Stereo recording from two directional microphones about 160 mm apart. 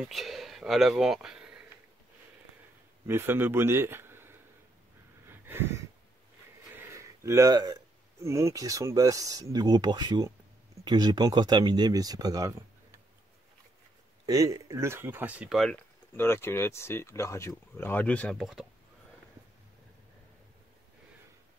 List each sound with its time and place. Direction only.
0.1 s speech: centre (ahead or behind)
3.1 s a man's voice: 15° right (ahead or behind)
5.2 s a sound: 15° right (ahead or behind)
6.7 s speech: 15° right (ahead or behind)
14.2 s speech: 20° right (ahead or behind); by 15.8 s centre (ahead or behind)
16.2 s speech: 15° left (ahead or behind); by 18.7 s centre (ahead or behind)